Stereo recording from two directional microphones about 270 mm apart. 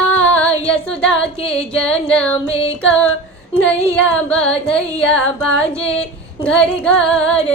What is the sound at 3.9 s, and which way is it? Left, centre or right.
Carnatic music, centre.